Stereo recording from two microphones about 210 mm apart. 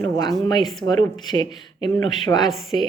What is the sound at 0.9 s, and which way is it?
Speech, 20° left (ahead or behind).